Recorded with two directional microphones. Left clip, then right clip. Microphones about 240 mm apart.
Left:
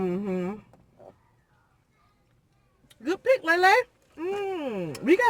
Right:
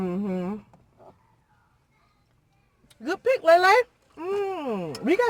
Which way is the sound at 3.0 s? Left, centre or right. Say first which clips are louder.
Right 2 dB; centre.